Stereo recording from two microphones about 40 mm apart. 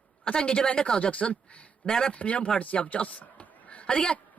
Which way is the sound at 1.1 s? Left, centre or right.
Left.